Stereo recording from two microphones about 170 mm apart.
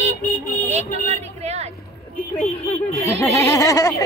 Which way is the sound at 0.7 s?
40° right (ahead or behind).